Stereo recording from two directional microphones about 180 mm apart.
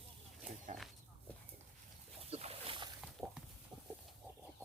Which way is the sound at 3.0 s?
Centre (ahead or behind).